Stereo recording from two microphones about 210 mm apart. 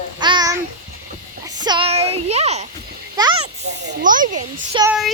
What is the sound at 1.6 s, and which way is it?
A child's voice, 25° right (ahead or behind).